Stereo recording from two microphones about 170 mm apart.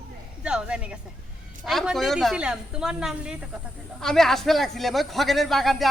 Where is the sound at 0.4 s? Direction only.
5° right (ahead or behind).